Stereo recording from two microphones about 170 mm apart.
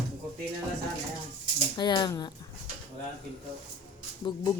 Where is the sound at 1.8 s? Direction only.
25° left (ahead or behind).